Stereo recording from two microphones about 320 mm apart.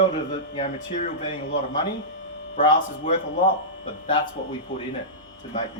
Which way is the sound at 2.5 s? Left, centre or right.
Centre.